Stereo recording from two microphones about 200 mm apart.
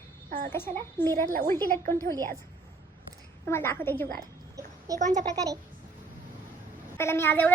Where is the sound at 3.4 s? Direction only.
10° left (ahead or behind).